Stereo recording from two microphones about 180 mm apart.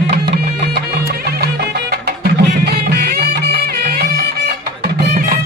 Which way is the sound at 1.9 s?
65° right (ahead or behind).